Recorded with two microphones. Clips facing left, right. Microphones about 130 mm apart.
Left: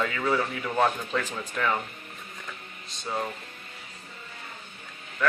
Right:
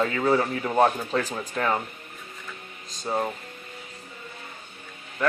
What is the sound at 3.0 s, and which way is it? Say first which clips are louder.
Speech: right 4 dB; 35° right (ahead or behind).